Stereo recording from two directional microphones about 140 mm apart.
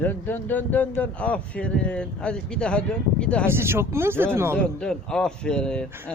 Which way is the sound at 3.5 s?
15° right (ahead or behind).